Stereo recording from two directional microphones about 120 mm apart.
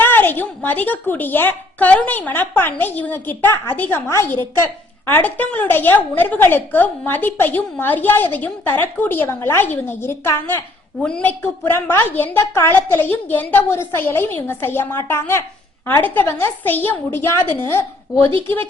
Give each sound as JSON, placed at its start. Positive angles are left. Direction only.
{"t": 0.0, "sound": "a woman's voice", "side_deg": 15}
{"t": 18.3, "sound": "speech", "side_deg": -45}